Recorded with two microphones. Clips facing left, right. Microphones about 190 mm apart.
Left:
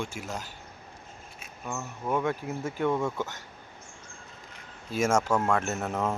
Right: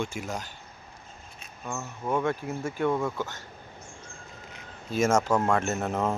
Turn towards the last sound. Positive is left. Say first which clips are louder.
# right 2 dB
turn(degrees=-5)  # may be behind; listen again after turning